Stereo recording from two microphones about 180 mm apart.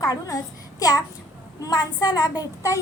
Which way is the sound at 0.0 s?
20° left (ahead or behind).